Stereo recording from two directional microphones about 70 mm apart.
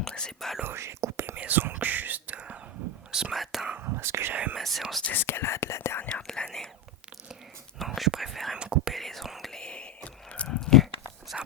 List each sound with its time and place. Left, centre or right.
0.1 s speech: centre
0.6 s speech: right
1.4 s speech: right
3.1 s speech: centre
3.8 s speech: right
4.5 s speech: centre
5.0 s speech: left
6.0 s whispering: centre
7.8 s whispering: centre
8.5 s whispering: centre
8.9 s whispering: centre
9.5 s whispering: centre
11.3 s dog: centre